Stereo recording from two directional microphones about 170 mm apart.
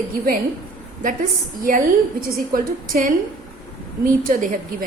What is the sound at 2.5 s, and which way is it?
A woman's voice, 55° right (ahead or behind).